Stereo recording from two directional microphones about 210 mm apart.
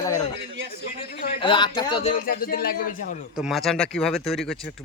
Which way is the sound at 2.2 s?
45° left (ahead or behind).